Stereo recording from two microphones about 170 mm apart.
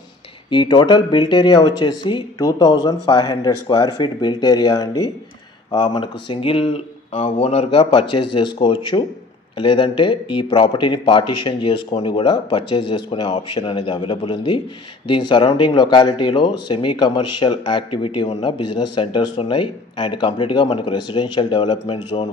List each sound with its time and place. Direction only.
0.5 s speech: 25° left (ahead or behind)